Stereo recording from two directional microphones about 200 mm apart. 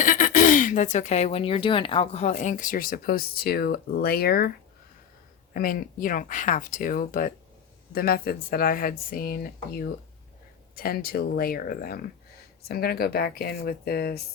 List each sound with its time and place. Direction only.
0.0 s speech: 40° left (ahead or behind)
5.5 s speech: 45° left (ahead or behind)